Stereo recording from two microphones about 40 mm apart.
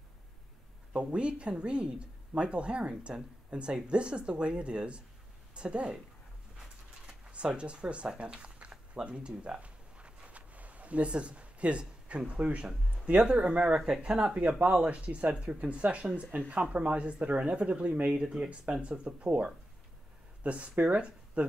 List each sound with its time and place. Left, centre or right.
0.9 s a woman's voice: right
7.1 s speech: right
8.2 s a sound: right
12.3 s speech: right
13.7 s speech: centre
14.0 s speech: right
16.3 s speech: right
16.7 s speech: right
18.2 s speech: centre
18.5 s speech: right